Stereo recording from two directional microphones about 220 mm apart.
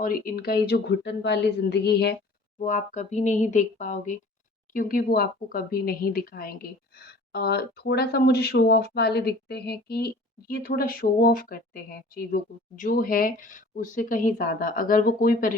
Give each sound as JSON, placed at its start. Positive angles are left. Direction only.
{"t": 0.0, "sound": "speech", "side_deg": 40}
{"t": 2.6, "sound": "speech", "side_deg": 35}